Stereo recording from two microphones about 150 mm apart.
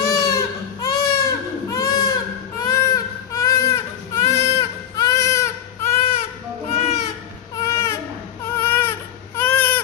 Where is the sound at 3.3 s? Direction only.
25° left (ahead or behind).